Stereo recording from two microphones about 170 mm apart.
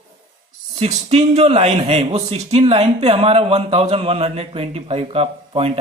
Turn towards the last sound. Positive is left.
turn(degrees=-35)  # may be behind; listen again after turning